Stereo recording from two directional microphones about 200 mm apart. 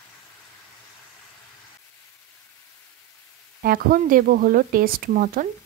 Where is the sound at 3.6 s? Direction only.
45° right (ahead or behind).